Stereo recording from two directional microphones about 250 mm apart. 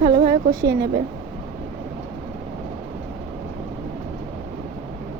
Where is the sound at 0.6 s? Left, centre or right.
Right.